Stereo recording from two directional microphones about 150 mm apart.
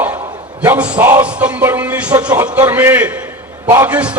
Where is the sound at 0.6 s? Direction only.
10° right (ahead or behind).